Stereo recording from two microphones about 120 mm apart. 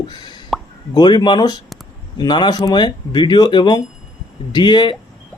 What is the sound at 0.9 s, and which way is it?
A man's voice, 40° left (ahead or behind).